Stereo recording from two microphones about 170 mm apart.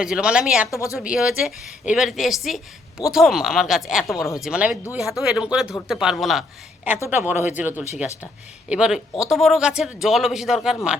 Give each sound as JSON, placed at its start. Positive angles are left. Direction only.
{"t": 0.0, "sound": "speech", "side_deg": -5}
{"t": 0.7, "sound": "a woman's voice", "side_deg": 20}
{"t": 0.9, "sound": "speech", "side_deg": -5}
{"t": 7.1, "sound": "speech", "side_deg": -10}